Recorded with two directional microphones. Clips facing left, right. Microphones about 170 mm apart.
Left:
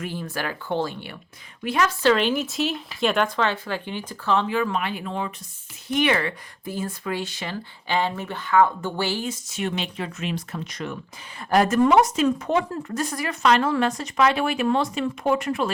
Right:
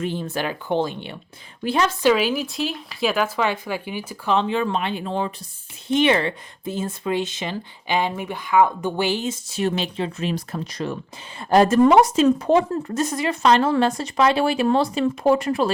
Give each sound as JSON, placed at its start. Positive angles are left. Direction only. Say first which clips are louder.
{"t": 0.0, "sound": "speech", "louder": "right 4 dB", "side_deg": -25}
{"t": 2.0, "sound": "speech", "louder": "even", "side_deg": -10}